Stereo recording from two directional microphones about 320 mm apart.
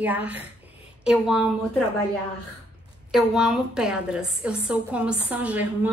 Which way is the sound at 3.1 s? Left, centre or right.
Centre.